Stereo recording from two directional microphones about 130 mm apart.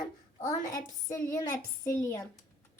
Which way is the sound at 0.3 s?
30° left (ahead or behind).